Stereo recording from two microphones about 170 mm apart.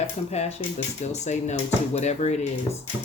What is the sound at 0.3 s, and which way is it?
Speech, 40° left (ahead or behind).